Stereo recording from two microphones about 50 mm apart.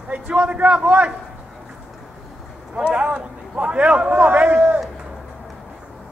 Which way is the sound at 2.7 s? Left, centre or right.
Right.